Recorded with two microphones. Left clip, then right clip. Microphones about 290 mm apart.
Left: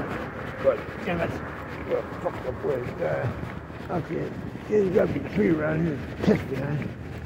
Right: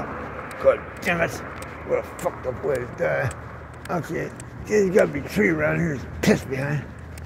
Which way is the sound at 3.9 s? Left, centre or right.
Right.